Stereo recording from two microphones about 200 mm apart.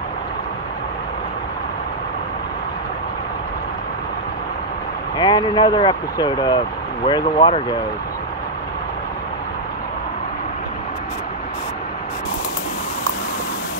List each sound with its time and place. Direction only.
5.1 s speech: 20° left (ahead or behind)